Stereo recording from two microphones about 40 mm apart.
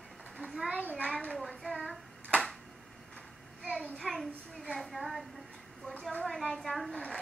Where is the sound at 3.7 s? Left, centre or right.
Centre.